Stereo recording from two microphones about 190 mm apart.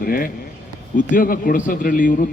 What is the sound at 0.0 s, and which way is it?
A man's voice, 50° left (ahead or behind).